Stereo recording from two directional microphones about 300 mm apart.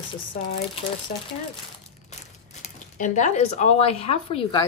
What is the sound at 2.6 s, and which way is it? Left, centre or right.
Speech, left.